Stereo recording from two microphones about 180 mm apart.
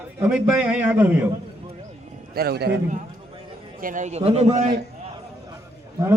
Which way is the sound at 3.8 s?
45° right (ahead or behind).